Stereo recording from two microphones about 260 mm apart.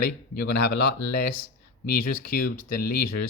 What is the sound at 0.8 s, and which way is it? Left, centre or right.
Speech, left.